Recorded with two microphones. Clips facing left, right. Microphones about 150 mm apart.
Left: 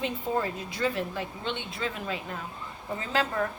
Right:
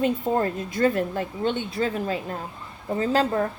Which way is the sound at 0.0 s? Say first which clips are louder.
Right 7 dB; 50° right (ahead or behind).